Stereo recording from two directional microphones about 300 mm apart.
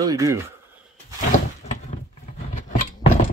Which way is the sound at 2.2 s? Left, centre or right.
Left.